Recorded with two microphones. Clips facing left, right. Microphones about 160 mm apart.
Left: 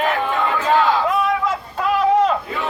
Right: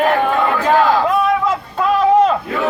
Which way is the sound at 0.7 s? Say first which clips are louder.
Right 3 dB; 40° right (ahead or behind).